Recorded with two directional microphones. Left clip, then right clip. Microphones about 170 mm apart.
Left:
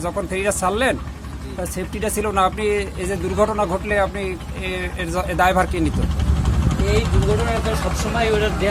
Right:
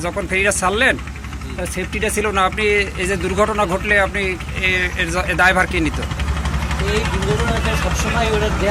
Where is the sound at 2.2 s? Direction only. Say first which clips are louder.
Right 1 dB; 15° left (ahead or behind).